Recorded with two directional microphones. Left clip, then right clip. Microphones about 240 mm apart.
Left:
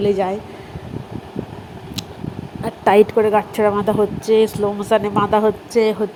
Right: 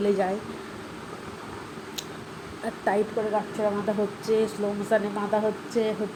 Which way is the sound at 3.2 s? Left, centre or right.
Left.